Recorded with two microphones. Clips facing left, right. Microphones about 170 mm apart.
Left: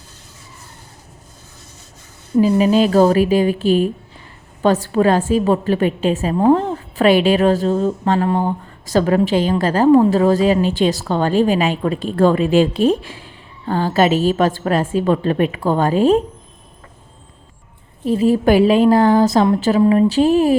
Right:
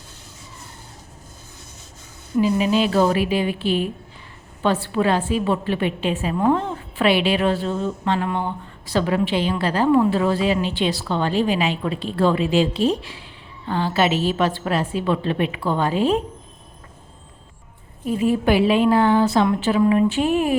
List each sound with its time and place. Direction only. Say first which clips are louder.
2.4 s a woman's voice: left 5 dB; 40° left (ahead or behind)
18.0 s a woman's voice: left 5 dB; 35° left (ahead or behind)